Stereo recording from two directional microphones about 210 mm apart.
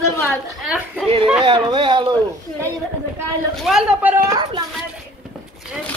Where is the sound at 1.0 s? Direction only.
25° right (ahead or behind).